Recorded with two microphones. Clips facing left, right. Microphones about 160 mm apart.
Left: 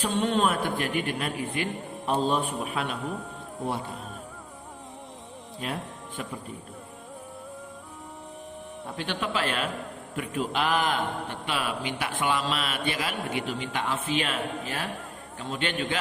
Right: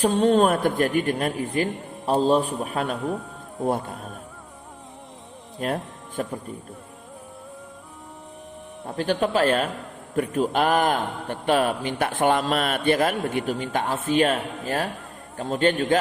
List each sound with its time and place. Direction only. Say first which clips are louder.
0.0 s a man's voice: right 7 dB; 40° right (ahead or behind)
5.6 s a man's voice: right 7 dB; 45° right (ahead or behind)
9.2 s a man's voice: right 8 dB; 45° right (ahead or behind)